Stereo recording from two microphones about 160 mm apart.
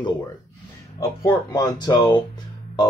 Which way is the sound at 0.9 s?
20° left (ahead or behind).